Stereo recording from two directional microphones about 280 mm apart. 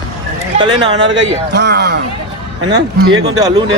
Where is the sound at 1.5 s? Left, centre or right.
Right.